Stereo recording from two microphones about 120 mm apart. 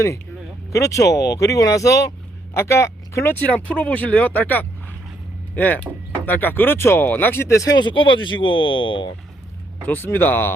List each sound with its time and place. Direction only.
0.7 s speech: 25° left (ahead or behind)
7.9 s speech: 45° left (ahead or behind)
9.8 s speech: 15° left (ahead or behind)